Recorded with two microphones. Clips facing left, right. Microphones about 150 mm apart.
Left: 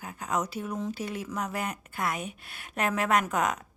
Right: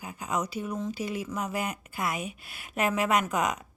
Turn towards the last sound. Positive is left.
turn(degrees=0)  # may be behind; listen again after turning